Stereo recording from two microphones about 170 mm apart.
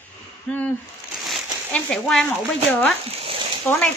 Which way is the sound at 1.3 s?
Centre (ahead or behind).